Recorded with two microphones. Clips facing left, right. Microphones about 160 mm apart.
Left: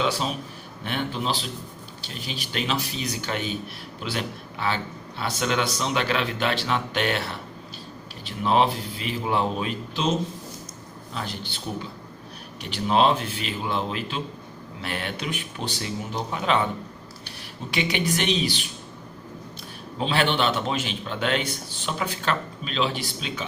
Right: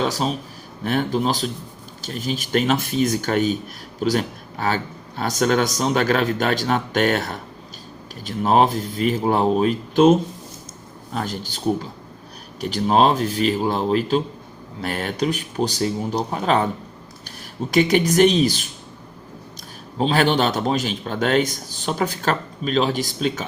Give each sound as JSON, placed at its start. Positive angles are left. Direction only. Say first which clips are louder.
{"t": 0.0, "sound": "a man's voice", "louder": "right 3 dB", "side_deg": -40}
{"t": 20.0, "sound": "a man's voice", "louder": "right 5 dB", "side_deg": -40}